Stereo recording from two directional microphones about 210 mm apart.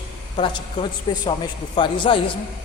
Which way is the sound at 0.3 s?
25° left (ahead or behind).